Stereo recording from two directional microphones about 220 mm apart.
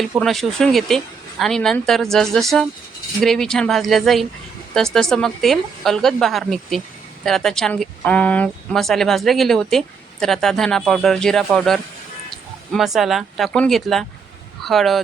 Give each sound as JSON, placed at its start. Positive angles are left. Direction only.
{"t": 0.0, "sound": "speech", "side_deg": 0}